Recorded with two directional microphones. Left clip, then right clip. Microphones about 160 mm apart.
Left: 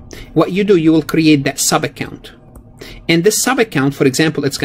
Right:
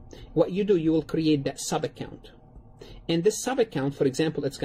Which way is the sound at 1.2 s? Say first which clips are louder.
Left 13 dB; 45° left (ahead or behind).